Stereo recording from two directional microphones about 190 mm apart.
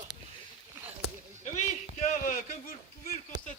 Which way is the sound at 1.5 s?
35° left (ahead or behind).